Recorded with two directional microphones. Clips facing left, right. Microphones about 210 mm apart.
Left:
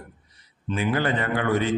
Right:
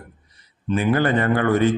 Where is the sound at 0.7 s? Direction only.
50° right (ahead or behind).